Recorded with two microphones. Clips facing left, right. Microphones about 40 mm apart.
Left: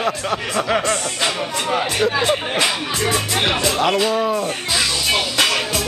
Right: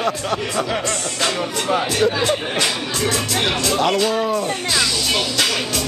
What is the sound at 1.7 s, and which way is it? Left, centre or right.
Speech, centre.